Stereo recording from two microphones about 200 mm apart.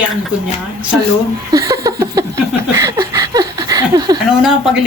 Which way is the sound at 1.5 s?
20° right (ahead or behind).